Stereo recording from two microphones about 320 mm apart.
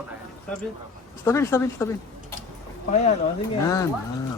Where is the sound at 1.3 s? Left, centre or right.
Centre.